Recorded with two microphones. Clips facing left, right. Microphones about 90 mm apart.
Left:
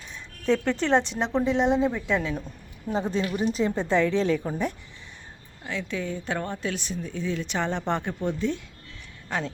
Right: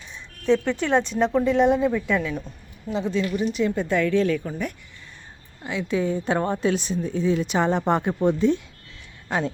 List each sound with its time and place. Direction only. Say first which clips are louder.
0.4 s speech: right 2 dB; 40° left (ahead or behind)
2.9 s speech: right 2 dB; 40° left (ahead or behind); by 4.7 s 25° left (ahead or behind)
5.6 s speech: right 6 dB; 10° right (ahead or behind)